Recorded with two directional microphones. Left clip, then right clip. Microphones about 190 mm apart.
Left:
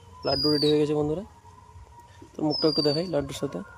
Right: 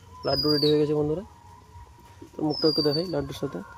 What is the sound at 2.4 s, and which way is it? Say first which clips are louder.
Speech: even; 15° left (ahead or behind).